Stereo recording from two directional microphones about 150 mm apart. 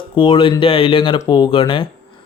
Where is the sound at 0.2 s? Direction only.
35° left (ahead or behind).